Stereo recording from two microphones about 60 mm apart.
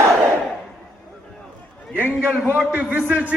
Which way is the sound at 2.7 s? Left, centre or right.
Right.